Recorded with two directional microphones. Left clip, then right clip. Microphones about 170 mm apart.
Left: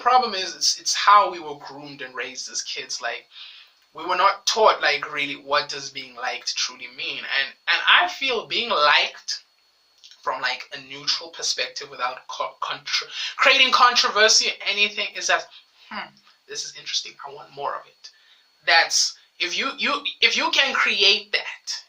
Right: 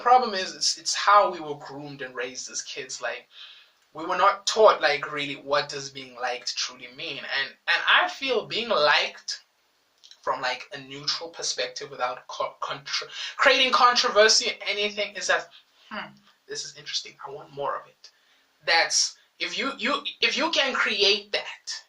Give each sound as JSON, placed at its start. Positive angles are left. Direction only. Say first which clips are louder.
{"t": 0.0, "sound": "speech", "louder": "left 1 dB", "side_deg": 15}
{"t": 10.4, "sound": "speech", "louder": "left 3 dB", "side_deg": 10}
{"t": 16.5, "sound": "speech", "louder": "left 4 dB", "side_deg": 15}
{"t": 18.6, "sound": "speech", "louder": "left 4 dB", "side_deg": 10}